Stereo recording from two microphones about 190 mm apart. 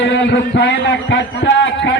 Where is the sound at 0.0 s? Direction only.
70° left (ahead or behind).